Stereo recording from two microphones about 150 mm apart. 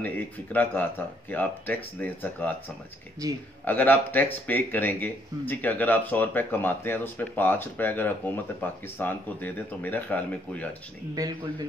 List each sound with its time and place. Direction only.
0.0 s speech: 10° left (ahead or behind)
3.2 s speech: 20° right (ahead or behind)
3.6 s speech: 10° left (ahead or behind)
11.1 s speech: 25° right (ahead or behind)